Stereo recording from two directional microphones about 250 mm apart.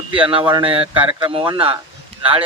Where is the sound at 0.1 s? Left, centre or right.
Right.